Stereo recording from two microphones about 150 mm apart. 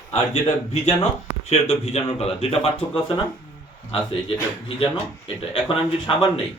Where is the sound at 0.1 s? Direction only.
45° left (ahead or behind).